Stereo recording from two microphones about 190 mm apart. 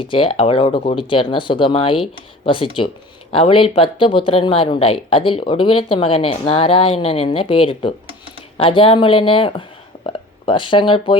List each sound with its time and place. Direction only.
0.0 s speech: 30° left (ahead or behind)